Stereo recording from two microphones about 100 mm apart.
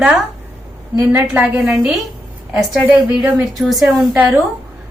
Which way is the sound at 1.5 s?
5° right (ahead or behind).